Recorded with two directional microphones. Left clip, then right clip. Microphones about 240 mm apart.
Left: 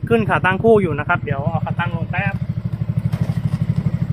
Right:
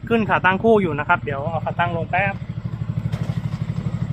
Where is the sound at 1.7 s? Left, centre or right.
Right.